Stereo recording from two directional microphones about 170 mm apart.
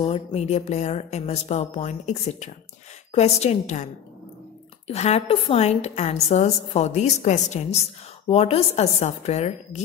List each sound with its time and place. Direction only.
0.0 s a woman's voice: 35° left (ahead or behind)